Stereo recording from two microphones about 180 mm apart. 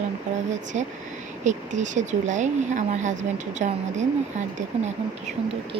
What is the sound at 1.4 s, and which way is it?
Speech, 40° right (ahead or behind).